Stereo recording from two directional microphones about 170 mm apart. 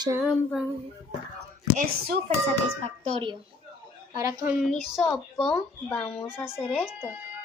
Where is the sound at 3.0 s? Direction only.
35° right (ahead or behind).